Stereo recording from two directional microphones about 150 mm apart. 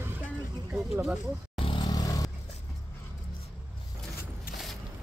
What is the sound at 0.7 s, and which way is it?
Speech, 5° right (ahead or behind).